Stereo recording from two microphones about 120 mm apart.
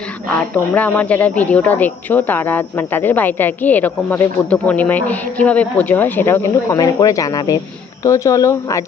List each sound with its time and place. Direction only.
0.5 s speech: 15° left (ahead or behind)
6.5 s speech: 30° left (ahead or behind)